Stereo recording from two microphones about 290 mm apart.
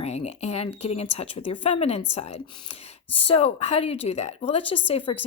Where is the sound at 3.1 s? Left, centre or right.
Centre.